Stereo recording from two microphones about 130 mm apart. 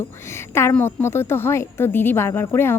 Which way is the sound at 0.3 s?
20° left (ahead or behind).